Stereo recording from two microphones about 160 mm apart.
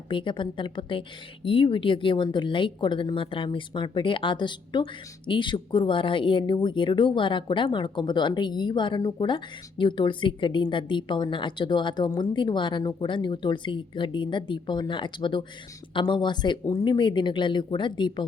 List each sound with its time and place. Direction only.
0.1 s a woman's voice: 30° left (ahead or behind)